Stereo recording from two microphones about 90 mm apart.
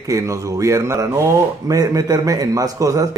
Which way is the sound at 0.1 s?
35° right (ahead or behind).